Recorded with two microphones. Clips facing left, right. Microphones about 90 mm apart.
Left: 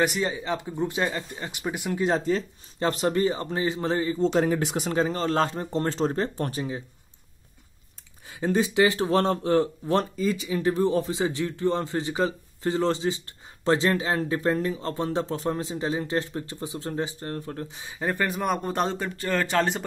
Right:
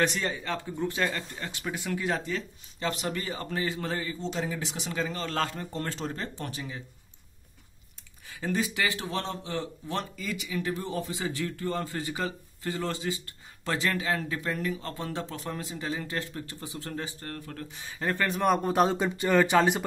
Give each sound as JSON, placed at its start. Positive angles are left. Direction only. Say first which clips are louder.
{"t": 0.0, "sound": "speech", "louder": "left 3 dB", "side_deg": 10}
{"t": 4.2, "sound": "speech", "louder": "left 10 dB", "side_deg": 50}
{"t": 8.3, "sound": "speech", "louder": "left 6 dB", "side_deg": 25}
{"t": 18.9, "sound": "speech", "louder": "right 3 dB", "side_deg": -15}